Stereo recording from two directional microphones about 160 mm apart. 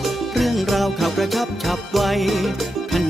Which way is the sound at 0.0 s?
Centre (ahead or behind).